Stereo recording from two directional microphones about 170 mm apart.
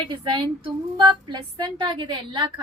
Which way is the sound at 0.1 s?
30° right (ahead or behind).